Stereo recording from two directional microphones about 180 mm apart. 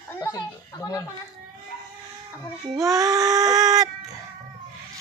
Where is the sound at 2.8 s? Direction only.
20° right (ahead or behind).